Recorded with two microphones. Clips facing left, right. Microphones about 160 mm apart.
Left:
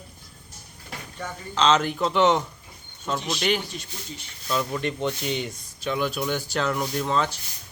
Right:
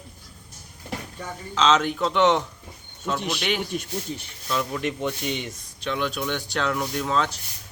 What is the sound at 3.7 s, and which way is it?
Speech, 55° right (ahead or behind).